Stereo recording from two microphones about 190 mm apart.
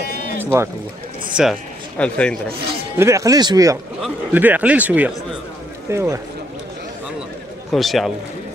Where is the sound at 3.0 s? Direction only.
15° right (ahead or behind).